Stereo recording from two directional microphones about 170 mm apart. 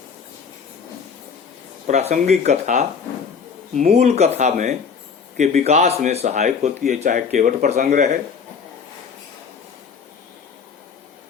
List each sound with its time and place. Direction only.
1.9 s speech: 40° right (ahead or behind)